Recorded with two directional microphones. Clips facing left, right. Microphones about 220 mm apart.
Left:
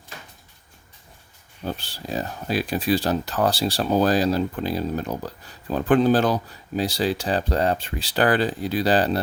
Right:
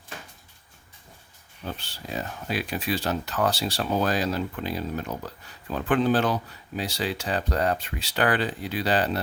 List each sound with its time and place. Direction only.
1.6 s speech: 35° left (ahead or behind)